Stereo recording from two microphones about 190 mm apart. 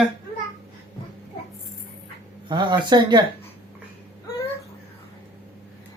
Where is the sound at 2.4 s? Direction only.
25° right (ahead or behind).